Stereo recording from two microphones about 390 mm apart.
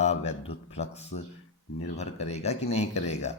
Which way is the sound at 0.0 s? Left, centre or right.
Centre.